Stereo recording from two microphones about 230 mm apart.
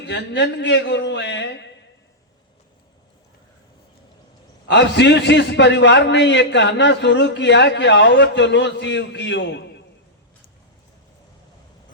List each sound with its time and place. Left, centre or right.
0.0 s speech: left
4.7 s a man's voice: left